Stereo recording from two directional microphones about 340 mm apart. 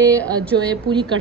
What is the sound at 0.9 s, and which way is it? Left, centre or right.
Speech, centre.